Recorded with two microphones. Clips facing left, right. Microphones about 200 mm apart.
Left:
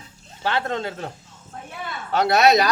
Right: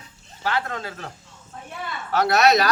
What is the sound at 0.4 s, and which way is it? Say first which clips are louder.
Speech: left 2 dB; 25° left (ahead or behind).